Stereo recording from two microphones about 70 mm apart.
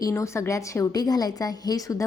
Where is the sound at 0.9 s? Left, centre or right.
Left.